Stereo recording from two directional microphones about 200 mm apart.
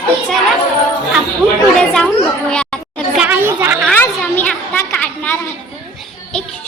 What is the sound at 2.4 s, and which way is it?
Chatter, 5° left (ahead or behind).